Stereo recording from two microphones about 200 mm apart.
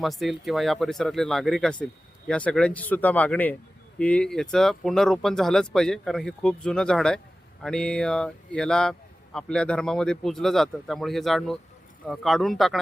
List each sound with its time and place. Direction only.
0.0 s speech: centre (ahead or behind)